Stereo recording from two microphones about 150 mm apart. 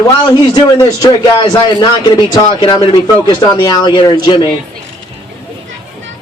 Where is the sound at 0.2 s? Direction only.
30° left (ahead or behind).